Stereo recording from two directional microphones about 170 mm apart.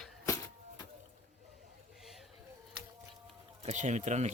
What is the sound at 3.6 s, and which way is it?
Speech, 45° right (ahead or behind).